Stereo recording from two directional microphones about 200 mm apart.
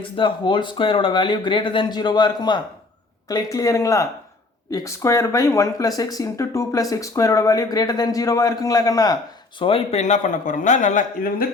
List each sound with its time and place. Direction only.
0.0 s a man's voice: 25° left (ahead or behind); by 11.4 s 40° left (ahead or behind)